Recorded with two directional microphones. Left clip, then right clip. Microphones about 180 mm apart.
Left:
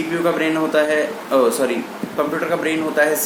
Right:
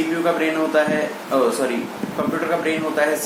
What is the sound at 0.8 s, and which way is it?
Speech, 60° left (ahead or behind).